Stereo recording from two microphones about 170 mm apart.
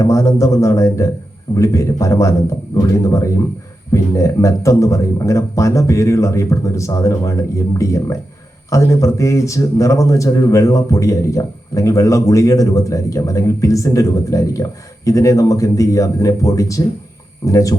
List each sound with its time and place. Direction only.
0.0 s a man's voice: 15° left (ahead or behind)